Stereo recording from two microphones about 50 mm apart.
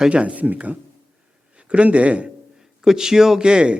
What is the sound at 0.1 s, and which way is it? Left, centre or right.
Speech, right.